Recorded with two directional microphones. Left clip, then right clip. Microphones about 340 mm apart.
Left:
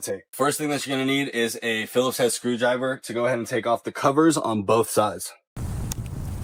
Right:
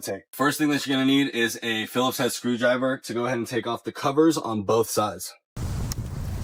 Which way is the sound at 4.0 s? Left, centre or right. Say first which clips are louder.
Left 1 dB; centre.